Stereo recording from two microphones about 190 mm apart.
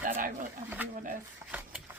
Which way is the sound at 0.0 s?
45° right (ahead or behind).